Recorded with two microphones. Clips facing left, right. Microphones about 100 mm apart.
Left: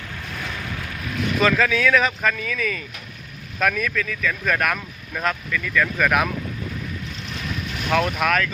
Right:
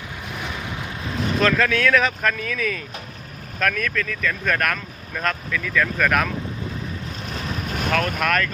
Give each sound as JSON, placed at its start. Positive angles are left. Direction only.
{"t": 0.3, "sound": "vehicle", "side_deg": -20}
{"t": 1.4, "sound": "speech", "side_deg": 0}
{"t": 7.3, "sound": "vehicle", "side_deg": -35}
{"t": 7.9, "sound": "speech", "side_deg": 10}